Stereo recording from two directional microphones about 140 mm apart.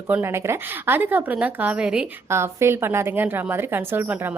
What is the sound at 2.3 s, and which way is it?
A woman's voice, 20° right (ahead or behind).